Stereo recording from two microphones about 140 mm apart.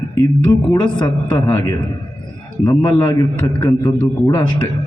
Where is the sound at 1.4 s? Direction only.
20° left (ahead or behind).